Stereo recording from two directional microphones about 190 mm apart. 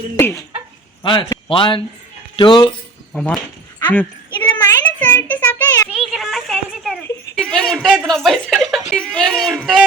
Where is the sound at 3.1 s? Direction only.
5° left (ahead or behind).